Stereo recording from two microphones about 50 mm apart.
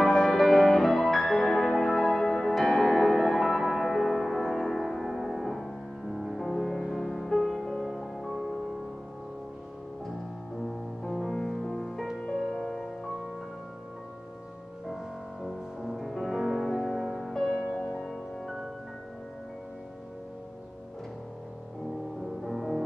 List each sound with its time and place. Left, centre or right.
0.0 s music: centre
10.6 s music: centre
15.4 s music: centre
18.1 s music: centre
22.4 s music: centre